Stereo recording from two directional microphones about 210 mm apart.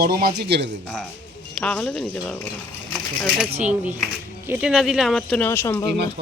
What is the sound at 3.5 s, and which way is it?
Speech, 30° right (ahead or behind).